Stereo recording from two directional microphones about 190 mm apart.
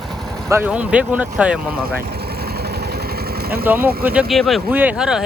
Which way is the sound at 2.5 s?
55° right (ahead or behind).